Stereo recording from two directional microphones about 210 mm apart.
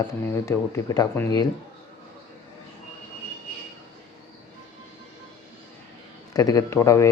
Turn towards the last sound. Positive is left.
turn(degrees=15)  # may be behind; listen again after turning